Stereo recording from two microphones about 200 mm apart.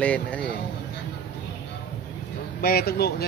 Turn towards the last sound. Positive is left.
turn(degrees=50)  # may be behind; listen again after turning